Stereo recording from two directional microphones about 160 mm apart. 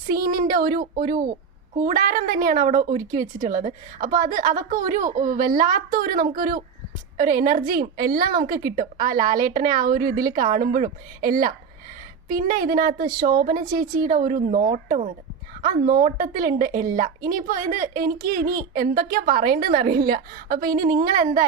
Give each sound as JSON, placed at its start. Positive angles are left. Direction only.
{"t": 0.1, "sound": "a woman's voice", "side_deg": -60}